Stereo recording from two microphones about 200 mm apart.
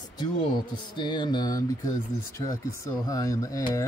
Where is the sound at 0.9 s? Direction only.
20° left (ahead or behind).